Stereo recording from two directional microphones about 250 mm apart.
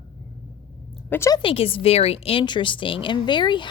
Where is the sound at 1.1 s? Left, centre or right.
Centre.